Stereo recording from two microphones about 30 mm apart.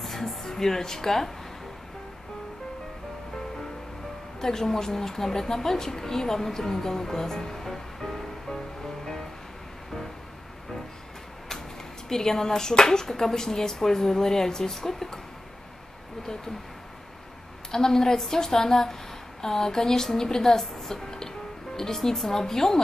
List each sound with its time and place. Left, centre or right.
0.3 s a woman's voice: centre
4.4 s a woman's voice: centre
12.1 s a woman's voice: centre
17.6 s a woman's voice: centre